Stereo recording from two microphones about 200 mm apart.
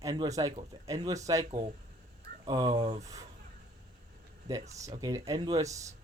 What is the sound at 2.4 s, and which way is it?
Speech, 20° right (ahead or behind).